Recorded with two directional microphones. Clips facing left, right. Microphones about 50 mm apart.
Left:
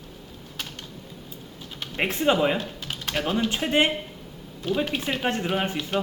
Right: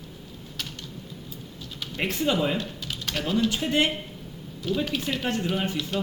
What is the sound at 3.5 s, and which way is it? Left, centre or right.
Speech, left.